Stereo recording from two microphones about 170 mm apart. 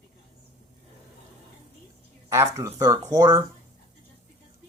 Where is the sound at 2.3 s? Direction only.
15° right (ahead or behind).